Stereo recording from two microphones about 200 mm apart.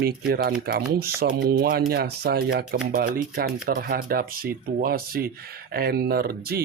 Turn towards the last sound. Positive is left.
turn(degrees=-50)  # may be behind; listen again after turning